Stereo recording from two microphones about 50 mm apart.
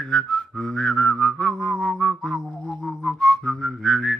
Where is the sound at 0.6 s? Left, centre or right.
Centre.